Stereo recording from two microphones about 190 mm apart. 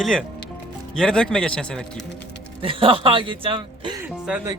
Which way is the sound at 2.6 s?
30° right (ahead or behind).